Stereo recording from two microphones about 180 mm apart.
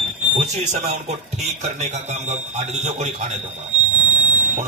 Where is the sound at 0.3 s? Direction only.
40° right (ahead or behind).